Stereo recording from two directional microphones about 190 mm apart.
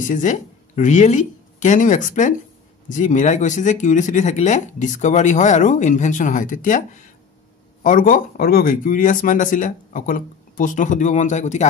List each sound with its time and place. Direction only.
0.1 s speech: 40° left (ahead or behind)